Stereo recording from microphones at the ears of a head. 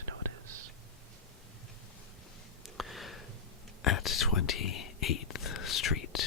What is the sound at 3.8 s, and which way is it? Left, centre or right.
Whispering, left.